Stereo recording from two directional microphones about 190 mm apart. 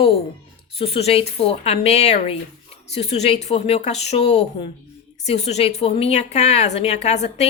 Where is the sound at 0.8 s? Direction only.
30° left (ahead or behind).